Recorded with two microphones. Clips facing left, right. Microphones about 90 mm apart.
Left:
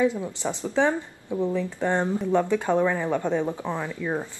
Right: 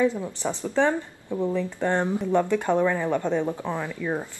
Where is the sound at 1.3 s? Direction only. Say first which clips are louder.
Even; 15° right (ahead or behind).